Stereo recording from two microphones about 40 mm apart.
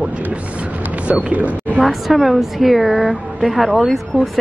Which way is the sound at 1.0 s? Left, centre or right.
Right.